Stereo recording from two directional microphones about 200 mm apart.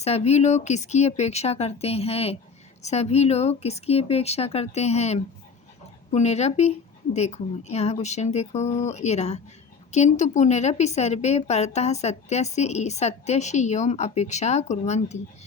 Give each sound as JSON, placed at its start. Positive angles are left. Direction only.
{"t": 0.0, "sound": "a woman's voice", "side_deg": 30}